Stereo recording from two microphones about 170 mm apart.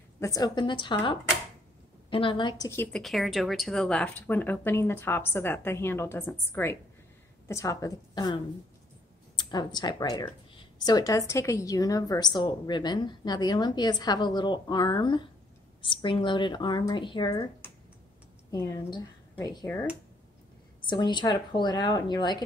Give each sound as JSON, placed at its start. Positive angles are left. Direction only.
{"t": 0.2, "sound": "speech", "side_deg": 20}
{"t": 2.9, "sound": "speech", "side_deg": 0}
{"t": 9.4, "sound": "speech", "side_deg": 25}
{"t": 18.5, "sound": "speech", "side_deg": 25}